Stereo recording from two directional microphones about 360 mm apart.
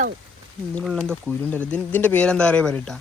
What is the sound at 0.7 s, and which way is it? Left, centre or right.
Speech, centre.